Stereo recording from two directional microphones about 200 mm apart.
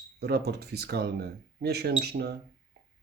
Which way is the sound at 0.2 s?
55° right (ahead or behind).